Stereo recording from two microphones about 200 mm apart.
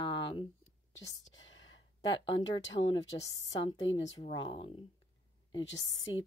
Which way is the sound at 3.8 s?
70° left (ahead or behind).